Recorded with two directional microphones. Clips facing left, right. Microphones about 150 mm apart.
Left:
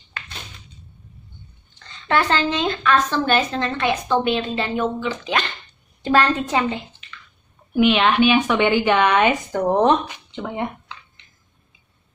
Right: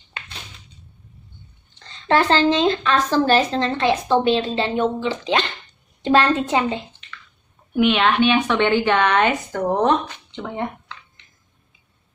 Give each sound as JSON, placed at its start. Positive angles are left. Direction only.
{"t": 1.8, "sound": "a woman's voice", "side_deg": -30}
{"t": 7.0, "sound": "squish", "side_deg": 5}
{"t": 7.7, "sound": "a woman's voice", "side_deg": 0}